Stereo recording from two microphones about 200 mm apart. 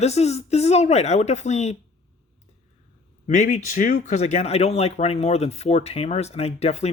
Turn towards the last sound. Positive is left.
turn(degrees=30)  # may be behind; listen again after turning